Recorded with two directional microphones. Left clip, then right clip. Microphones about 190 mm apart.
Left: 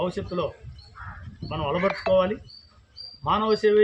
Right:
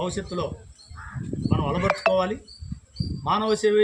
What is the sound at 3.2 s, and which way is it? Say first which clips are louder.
Speech: left 1 dB; 5° right (ahead or behind).